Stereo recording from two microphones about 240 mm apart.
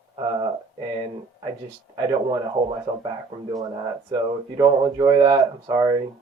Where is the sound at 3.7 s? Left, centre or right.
Centre.